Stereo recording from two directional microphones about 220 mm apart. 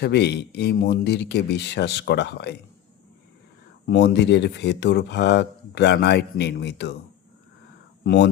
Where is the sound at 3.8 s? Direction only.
50° left (ahead or behind).